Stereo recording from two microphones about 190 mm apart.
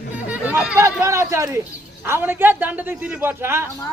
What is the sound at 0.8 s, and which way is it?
Speech, 15° right (ahead or behind).